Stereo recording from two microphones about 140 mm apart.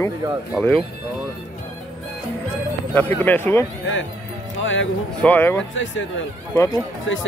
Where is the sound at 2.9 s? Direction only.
15° left (ahead or behind).